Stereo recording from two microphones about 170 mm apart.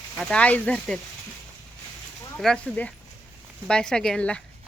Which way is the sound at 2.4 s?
5° left (ahead or behind).